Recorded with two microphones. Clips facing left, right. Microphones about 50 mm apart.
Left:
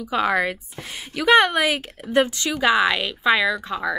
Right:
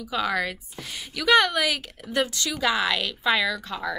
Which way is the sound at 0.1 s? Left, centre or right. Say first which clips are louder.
Left 5 dB; left.